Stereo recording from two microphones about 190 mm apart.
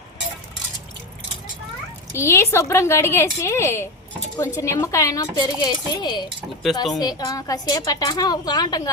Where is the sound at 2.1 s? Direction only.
15° left (ahead or behind).